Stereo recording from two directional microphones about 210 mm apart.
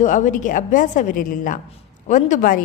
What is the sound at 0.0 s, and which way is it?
A man's voice, 35° left (ahead or behind).